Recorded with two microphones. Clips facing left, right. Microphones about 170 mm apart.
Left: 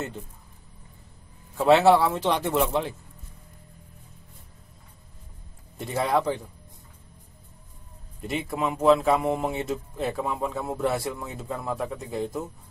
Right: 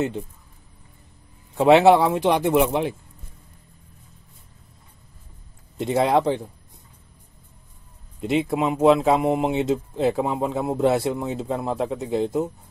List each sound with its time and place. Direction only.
1.6 s speech: 20° right (ahead or behind)
5.8 s speech: 20° right (ahead or behind)
8.2 s speech: 20° right (ahead or behind)